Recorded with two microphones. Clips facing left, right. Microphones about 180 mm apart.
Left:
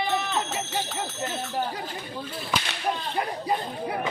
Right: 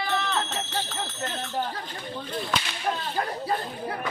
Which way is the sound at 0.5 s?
10° left (ahead or behind).